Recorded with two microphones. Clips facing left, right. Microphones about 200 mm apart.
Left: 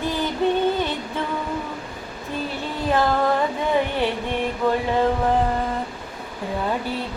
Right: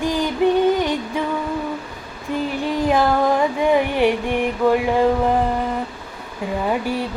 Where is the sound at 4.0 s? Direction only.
15° right (ahead or behind).